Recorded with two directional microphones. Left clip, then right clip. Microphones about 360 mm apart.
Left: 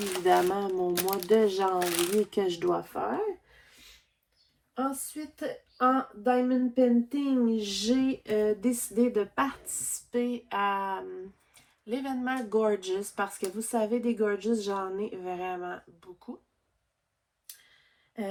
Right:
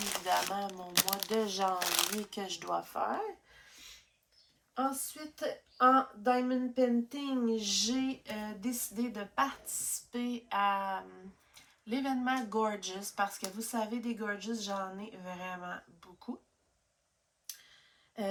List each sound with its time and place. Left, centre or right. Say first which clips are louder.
0.3 s speech: left 8 dB; centre
1.1 s speech: left 10 dB; centre
1.4 s speech: left 6 dB; centre
4.7 s speech: left 2 dB; centre